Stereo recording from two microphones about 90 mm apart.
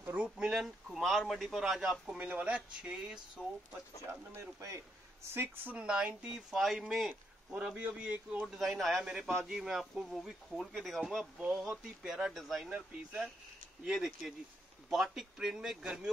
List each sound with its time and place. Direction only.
0.0 s speech: 20° right (ahead or behind)
0.4 s speech: 5° right (ahead or behind)
2.1 s speech: 15° right (ahead or behind)
4.1 s speech: 30° right (ahead or behind)
5.3 s speech: 25° right (ahead or behind); by 7.1 s centre (ahead or behind)
7.1 s speech: 15° right (ahead or behind)
8.5 s speech: centre (ahead or behind)